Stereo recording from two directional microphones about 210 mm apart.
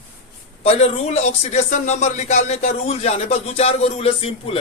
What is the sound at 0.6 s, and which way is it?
Speech, 30° left (ahead or behind).